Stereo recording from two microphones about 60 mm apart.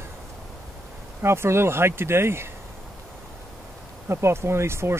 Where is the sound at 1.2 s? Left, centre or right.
Right.